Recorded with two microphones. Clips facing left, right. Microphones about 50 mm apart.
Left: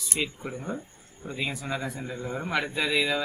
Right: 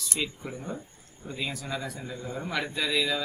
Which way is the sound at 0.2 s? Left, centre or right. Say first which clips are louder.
Left 2 dB; centre.